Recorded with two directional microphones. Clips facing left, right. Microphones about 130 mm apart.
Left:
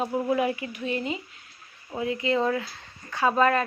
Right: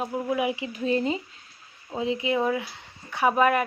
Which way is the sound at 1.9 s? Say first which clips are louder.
Even; 20° right (ahead or behind).